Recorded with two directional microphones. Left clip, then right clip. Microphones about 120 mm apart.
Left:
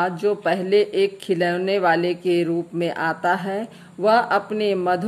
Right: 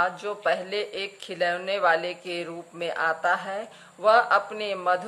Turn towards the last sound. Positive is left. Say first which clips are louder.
# left 5 dB
turn(degrees=35)  # may be behind; listen again after turning